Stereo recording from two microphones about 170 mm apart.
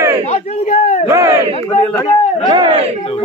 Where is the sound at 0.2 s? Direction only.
35° left (ahead or behind).